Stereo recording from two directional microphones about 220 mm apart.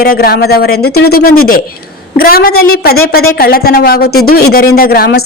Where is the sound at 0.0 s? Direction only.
45° left (ahead or behind).